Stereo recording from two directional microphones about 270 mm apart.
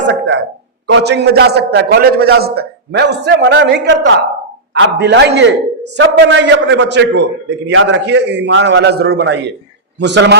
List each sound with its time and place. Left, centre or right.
0.1 s a man's voice: right